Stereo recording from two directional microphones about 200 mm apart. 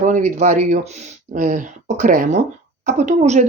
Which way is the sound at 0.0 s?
40° right (ahead or behind).